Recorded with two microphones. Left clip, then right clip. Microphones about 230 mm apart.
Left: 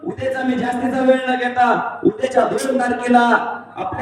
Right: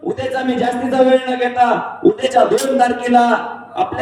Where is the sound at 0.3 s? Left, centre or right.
Right.